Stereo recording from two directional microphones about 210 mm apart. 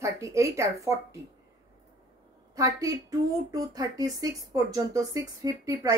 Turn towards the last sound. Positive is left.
turn(degrees=-15)  # may be behind; listen again after turning